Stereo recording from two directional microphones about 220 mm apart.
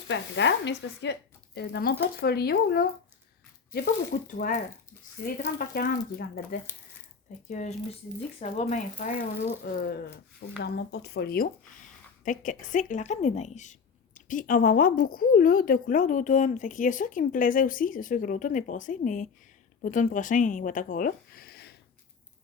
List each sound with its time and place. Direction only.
0.1 s speech: 55° left (ahead or behind)
4.3 s a woman's voice: 35° left (ahead or behind)
7.5 s a woman's voice: 35° left (ahead or behind)